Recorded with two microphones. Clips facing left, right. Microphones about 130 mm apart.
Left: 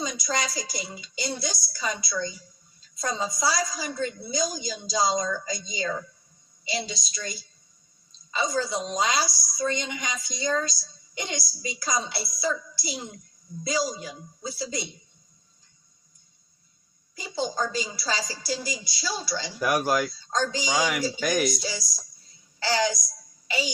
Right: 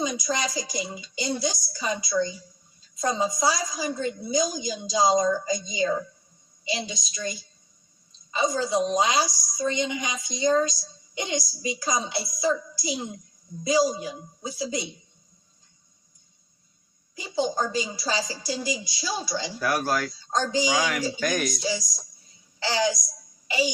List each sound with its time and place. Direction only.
0.0 s a woman's voice: 15° right (ahead or behind)
17.2 s a woman's voice: 15° right (ahead or behind)
19.5 s speech: 15° left (ahead or behind)
20.1 s a woman's voice: 15° right (ahead or behind)
20.6 s speech: 15° left (ahead or behind)
21.6 s a woman's voice: 15° right (ahead or behind)
23.5 s music: 15° right (ahead or behind)